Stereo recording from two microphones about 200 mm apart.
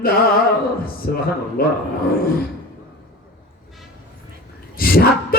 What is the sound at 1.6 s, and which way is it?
Speech, 50° left (ahead or behind).